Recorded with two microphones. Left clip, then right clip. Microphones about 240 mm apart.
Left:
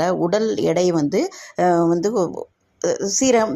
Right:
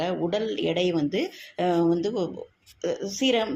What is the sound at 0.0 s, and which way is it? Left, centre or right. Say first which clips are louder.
Speech: left 8 dB; left.